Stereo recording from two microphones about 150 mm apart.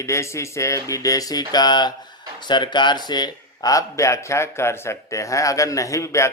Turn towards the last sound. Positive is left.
turn(degrees=20)  # may be behind; listen again after turning